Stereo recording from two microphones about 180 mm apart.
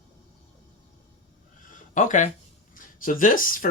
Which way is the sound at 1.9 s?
45° left (ahead or behind).